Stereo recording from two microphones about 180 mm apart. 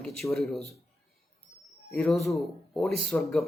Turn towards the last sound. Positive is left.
turn(degrees=0)  # may be behind; listen again after turning